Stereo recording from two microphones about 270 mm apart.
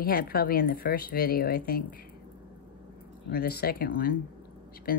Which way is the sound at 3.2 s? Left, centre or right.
Left.